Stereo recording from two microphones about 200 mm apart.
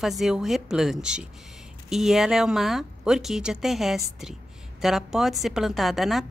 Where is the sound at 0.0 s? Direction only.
Centre (ahead or behind).